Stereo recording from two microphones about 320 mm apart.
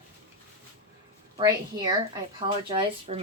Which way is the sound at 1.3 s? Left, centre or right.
Centre.